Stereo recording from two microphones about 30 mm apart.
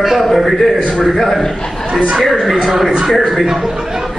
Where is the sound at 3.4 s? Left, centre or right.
Centre.